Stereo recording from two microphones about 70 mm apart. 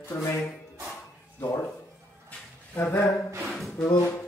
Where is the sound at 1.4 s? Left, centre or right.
Left.